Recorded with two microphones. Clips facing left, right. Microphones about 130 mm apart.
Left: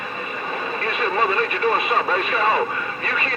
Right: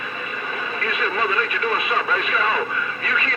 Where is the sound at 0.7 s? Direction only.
35° left (ahead or behind).